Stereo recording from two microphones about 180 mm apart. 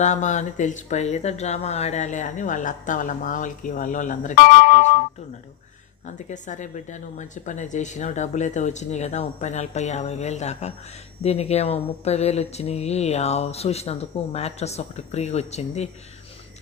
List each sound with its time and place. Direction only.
0.0 s speech: 40° left (ahead or behind)
6.1 s speech: 45° left (ahead or behind)